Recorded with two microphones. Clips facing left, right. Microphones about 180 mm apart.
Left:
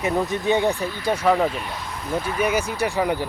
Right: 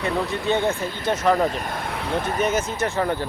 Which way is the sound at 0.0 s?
15° left (ahead or behind).